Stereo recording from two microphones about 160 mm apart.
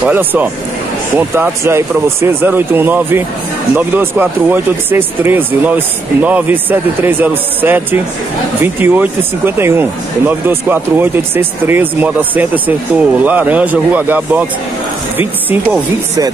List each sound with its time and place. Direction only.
0.0 s speech: 10° right (ahead or behind)